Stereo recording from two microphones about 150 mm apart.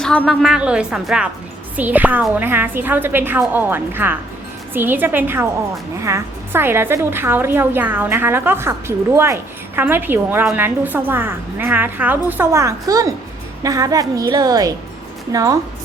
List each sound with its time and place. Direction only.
0.0 s a woman's voice: 5° left (ahead or behind); by 15.5 s 20° right (ahead or behind)